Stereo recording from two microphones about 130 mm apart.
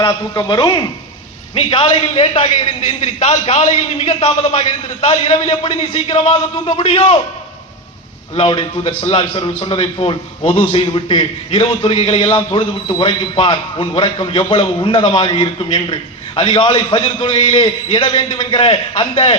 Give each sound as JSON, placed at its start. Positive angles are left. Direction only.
{"t": 0.0, "sound": "a man's voice", "side_deg": 25}
{"t": 1.5, "sound": "a man's voice", "side_deg": 40}
{"t": 8.4, "sound": "a man's voice", "side_deg": 40}